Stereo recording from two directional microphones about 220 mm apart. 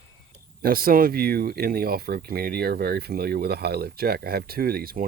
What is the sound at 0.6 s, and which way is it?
Speech, 40° right (ahead or behind).